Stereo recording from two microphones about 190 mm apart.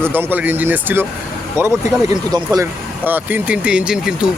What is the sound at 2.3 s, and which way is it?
Speech, 20° right (ahead or behind).